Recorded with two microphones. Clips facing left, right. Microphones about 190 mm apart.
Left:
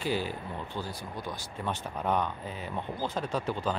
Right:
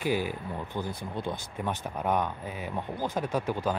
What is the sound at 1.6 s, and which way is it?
Speech, 10° right (ahead or behind).